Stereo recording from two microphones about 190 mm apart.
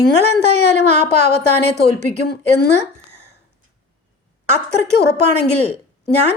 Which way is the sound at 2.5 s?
60° left (ahead or behind).